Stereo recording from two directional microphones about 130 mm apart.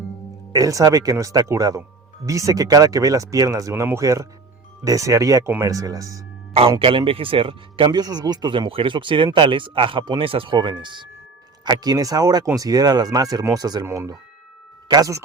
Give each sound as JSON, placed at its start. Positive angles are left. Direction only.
{"t": 0.5, "sound": "speech", "side_deg": -25}
{"t": 6.5, "sound": "speech", "side_deg": -45}